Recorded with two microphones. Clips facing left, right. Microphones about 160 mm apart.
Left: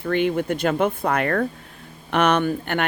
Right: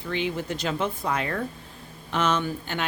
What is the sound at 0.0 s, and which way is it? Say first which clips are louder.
Speech: left 7 dB; 55° left (ahead or behind).